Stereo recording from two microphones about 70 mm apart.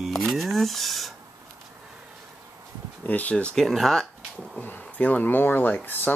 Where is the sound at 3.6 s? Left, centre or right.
Centre.